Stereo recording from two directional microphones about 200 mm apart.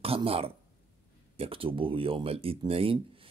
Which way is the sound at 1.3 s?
30° right (ahead or behind).